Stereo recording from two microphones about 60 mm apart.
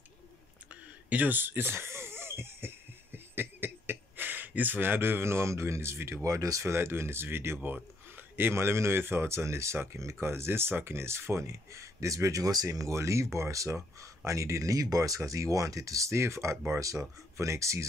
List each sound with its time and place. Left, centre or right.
1.1 s a sound: right
6.2 s speech: right
6.6 s speech: right
16.8 s speech: right